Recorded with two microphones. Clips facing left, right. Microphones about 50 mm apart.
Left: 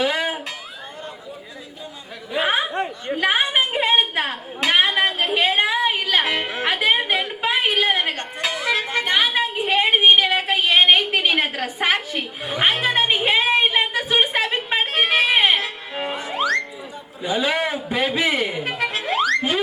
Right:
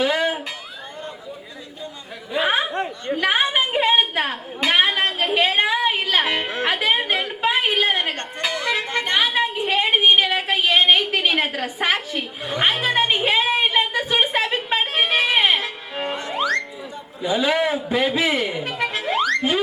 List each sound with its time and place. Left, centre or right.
0.0 s music: centre
2.3 s a sound: centre
3.2 s a woman's voice: centre
3.6 s a sound: centre
6.2 s music: centre
7.9 s a woman's voice: centre
10.8 s a sound: centre
11.3 s a woman's voice: centre
13.7 s a sound: centre
14.4 s music: centre
17.2 s a man's voice: centre
18.8 s music: centre